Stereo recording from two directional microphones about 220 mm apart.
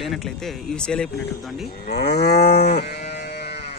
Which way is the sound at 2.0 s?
50° left (ahead or behind).